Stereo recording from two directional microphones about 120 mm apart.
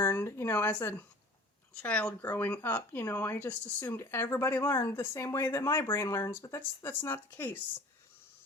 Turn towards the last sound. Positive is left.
turn(degrees=15)  # may be behind; listen again after turning